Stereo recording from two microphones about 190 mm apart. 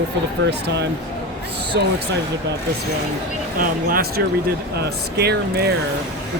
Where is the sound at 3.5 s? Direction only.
50° right (ahead or behind).